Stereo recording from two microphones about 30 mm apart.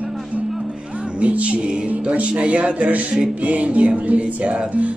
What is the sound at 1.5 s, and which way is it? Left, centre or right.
Music, right.